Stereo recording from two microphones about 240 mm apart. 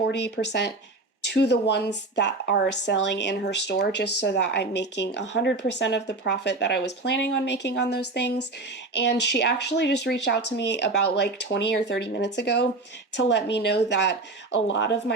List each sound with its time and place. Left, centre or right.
0.0 s speech: left